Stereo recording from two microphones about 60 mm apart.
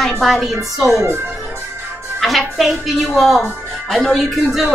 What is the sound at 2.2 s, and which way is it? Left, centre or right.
A woman's voice, centre.